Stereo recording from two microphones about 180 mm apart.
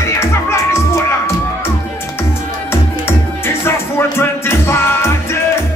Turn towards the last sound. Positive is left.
turn(degrees=15)  # may be behind; listen again after turning